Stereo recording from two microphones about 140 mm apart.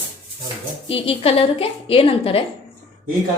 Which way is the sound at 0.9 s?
40° left (ahead or behind).